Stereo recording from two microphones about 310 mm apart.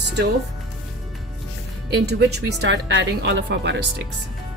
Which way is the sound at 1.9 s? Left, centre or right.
Right.